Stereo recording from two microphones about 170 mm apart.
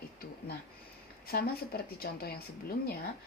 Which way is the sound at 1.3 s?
65° left (ahead or behind).